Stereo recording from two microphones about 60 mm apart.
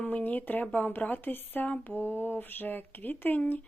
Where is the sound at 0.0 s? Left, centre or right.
Left.